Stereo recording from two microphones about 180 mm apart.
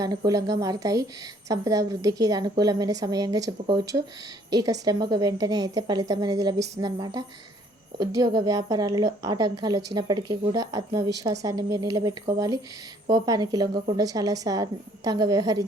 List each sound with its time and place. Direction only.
0.0 s a woman's voice: 20° right (ahead or behind)